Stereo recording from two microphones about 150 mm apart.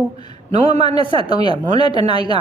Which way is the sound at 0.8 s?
30° left (ahead or behind).